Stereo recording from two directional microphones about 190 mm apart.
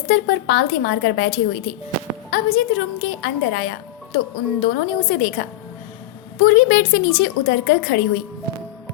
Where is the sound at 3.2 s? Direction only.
70° left (ahead or behind).